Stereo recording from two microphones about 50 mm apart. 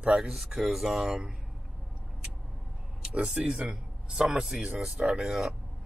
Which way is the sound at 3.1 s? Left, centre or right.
Right.